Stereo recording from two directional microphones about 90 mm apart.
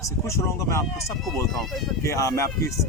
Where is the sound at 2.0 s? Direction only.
35° left (ahead or behind).